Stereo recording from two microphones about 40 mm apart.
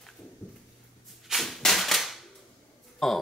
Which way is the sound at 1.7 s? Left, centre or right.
Centre.